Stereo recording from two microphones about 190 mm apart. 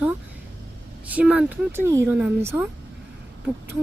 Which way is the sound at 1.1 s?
5° right (ahead or behind).